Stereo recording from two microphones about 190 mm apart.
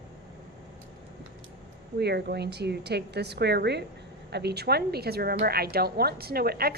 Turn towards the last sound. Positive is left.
turn(degrees=-55)  # may be behind; listen again after turning